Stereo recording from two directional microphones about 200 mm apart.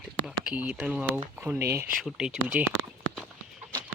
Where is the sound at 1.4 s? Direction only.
10° right (ahead or behind).